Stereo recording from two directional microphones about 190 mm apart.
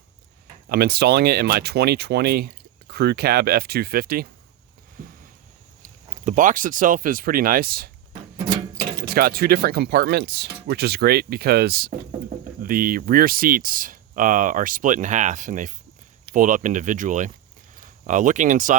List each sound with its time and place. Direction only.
0.7 s speech: 55° right (ahead or behind)
5.0 s a sound: 45° right (ahead or behind)
6.2 s speech: 45° right (ahead or behind)
9.0 s speech: 50° right (ahead or behind)